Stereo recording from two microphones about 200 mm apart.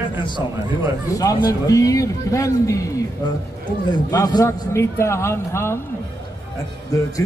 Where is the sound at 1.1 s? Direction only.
15° left (ahead or behind).